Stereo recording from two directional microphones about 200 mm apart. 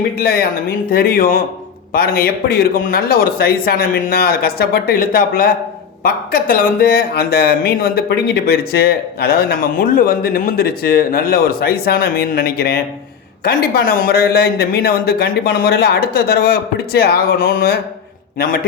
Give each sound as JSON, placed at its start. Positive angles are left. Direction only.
{"t": 0.2, "sound": "speech", "side_deg": 50}